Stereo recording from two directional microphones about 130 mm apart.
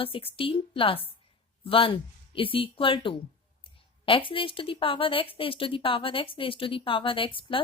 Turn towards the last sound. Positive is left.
turn(degrees=40)  # may be behind; listen again after turning